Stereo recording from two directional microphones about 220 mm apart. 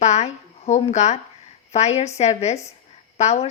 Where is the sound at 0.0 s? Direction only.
30° left (ahead or behind).